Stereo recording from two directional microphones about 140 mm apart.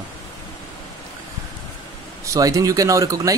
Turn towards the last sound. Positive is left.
turn(degrees=-25)  # may be behind; listen again after turning